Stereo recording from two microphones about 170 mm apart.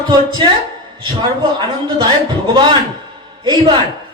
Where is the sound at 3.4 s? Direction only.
25° right (ahead or behind).